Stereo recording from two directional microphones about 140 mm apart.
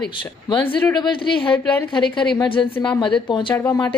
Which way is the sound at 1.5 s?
10° left (ahead or behind).